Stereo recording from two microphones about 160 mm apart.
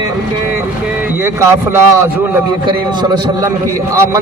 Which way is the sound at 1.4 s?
20° right (ahead or behind).